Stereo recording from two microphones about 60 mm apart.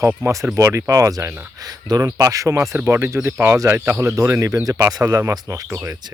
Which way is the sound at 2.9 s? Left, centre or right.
Right.